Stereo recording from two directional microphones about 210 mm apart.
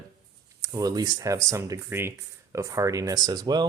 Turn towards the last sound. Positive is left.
turn(degrees=-20)  # may be behind; listen again after turning